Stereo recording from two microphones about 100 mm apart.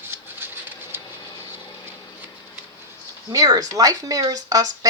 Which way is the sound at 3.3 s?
40° right (ahead or behind).